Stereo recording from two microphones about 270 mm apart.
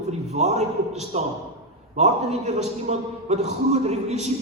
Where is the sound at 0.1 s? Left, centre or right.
Right.